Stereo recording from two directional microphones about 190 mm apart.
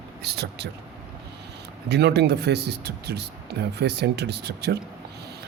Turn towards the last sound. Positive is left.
turn(degrees=-60)  # may be behind; listen again after turning